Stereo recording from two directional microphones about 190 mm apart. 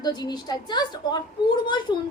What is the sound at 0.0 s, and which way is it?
A woman's voice, 20° left (ahead or behind).